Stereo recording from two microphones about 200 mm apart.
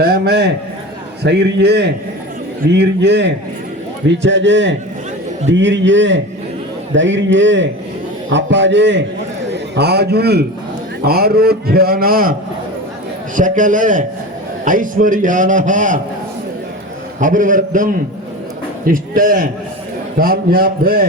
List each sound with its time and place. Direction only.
0.0 s a man's voice: 50° right (ahead or behind)
13.3 s a man's voice: 40° right (ahead or behind)
17.2 s a man's voice: 40° right (ahead or behind)